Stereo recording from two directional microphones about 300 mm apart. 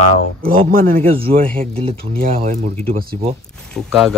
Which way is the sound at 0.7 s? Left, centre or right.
Right.